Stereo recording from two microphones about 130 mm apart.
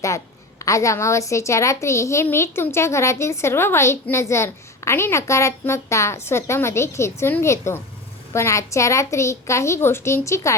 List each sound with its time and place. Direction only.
0.6 s a child's voice: 25° left (ahead or behind)